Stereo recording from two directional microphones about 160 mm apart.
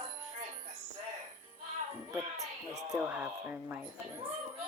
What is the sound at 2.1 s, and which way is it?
Speech, 20° right (ahead or behind).